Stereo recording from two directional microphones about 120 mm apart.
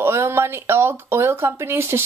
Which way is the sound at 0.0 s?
20° right (ahead or behind).